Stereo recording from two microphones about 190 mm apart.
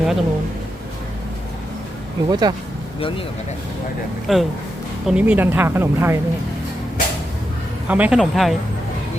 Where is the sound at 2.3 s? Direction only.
20° right (ahead or behind).